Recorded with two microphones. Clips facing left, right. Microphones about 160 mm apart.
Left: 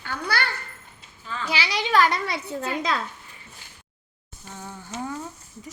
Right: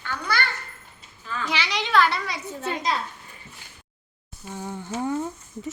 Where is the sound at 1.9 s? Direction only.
45° left (ahead or behind).